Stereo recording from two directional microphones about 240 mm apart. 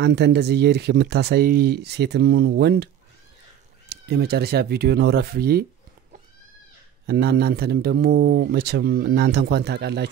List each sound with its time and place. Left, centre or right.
0.0 s speech: right
3.9 s speech: right
7.1 s speech: right